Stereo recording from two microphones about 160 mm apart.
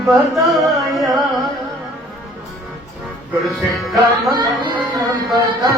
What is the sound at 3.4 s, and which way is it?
Music, centre (ahead or behind).